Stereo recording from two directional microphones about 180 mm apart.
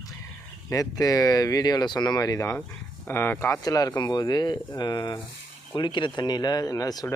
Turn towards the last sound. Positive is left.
turn(degrees=20)  # may be behind; listen again after turning